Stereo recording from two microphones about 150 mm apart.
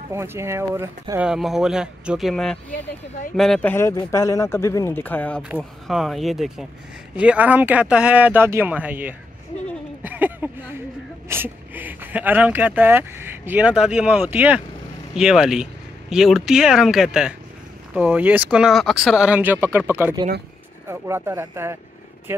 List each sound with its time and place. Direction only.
0.1 s speech: 15° right (ahead or behind)
1.2 s speech: 5° right (ahead or behind)
3.7 s speech: 20° left (ahead or behind)
5.6 s speech: centre (ahead or behind)
10.0 s a sound: 10° right (ahead or behind)
11.2 s speech: 15° right (ahead or behind)